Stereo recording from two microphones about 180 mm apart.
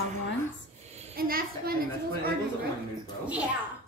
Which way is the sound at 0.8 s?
35° right (ahead or behind).